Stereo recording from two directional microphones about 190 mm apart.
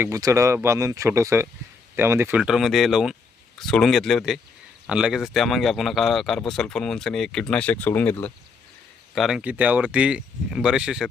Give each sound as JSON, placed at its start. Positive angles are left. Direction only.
{"t": 0.0, "sound": "speech", "side_deg": -15}
{"t": 9.1, "sound": "speech", "side_deg": 0}